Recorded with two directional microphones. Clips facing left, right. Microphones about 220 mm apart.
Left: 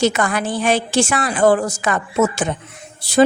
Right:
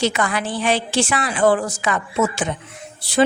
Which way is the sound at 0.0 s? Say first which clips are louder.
Left 3 dB; 45° left (ahead or behind).